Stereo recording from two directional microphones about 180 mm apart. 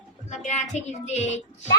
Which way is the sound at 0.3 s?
40° left (ahead or behind).